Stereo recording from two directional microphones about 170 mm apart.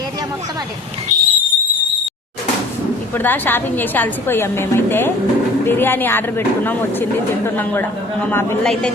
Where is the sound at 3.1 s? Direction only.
10° left (ahead or behind).